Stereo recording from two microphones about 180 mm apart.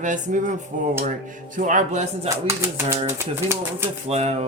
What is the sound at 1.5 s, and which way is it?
Speech, 45° right (ahead or behind).